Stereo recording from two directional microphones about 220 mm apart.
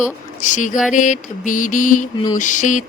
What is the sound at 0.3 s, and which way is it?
A woman's voice, 35° left (ahead or behind).